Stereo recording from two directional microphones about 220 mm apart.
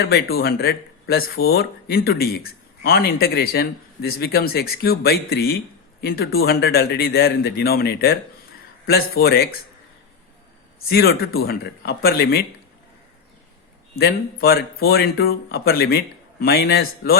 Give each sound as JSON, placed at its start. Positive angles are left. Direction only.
{"t": 0.0, "sound": "speech", "side_deg": 45}
{"t": 10.8, "sound": "speech", "side_deg": 45}
{"t": 13.9, "sound": "speech", "side_deg": 45}